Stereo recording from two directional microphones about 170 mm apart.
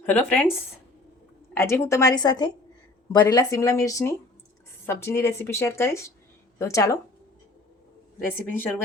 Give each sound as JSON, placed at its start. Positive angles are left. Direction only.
{"t": 0.0, "sound": "speech", "side_deg": 10}
{"t": 1.5, "sound": "speech", "side_deg": 15}
{"t": 8.2, "sound": "speech", "side_deg": 15}